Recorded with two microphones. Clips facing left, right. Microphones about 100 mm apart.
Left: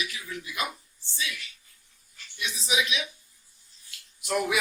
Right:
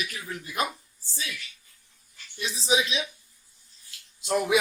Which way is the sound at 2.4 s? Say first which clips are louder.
Right 3 dB; 30° right (ahead or behind).